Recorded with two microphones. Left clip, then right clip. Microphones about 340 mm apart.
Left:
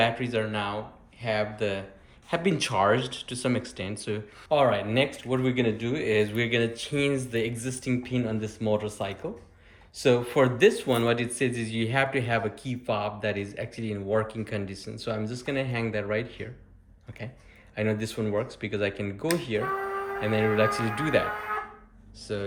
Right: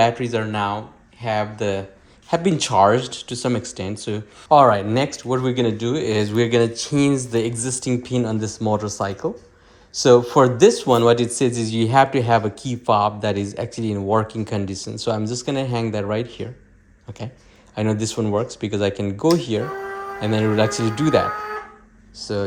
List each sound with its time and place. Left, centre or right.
0.0 s speech: centre
17.7 s speech: centre